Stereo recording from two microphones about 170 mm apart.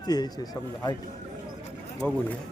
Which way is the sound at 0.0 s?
25° left (ahead or behind).